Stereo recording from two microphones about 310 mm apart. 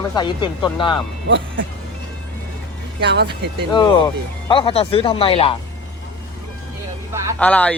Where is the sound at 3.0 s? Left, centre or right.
Right.